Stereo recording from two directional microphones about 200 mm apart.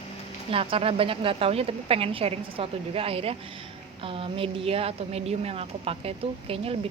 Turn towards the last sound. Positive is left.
turn(degrees=-30)  # may be behind; listen again after turning